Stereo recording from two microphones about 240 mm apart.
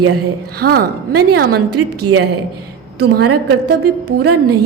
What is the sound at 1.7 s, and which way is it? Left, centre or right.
Speech, right.